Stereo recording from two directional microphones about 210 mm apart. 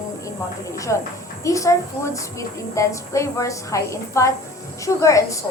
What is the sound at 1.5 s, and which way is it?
Speech, 15° left (ahead or behind).